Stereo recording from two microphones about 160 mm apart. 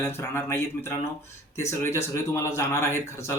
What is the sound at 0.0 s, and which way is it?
A man's voice, 15° left (ahead or behind).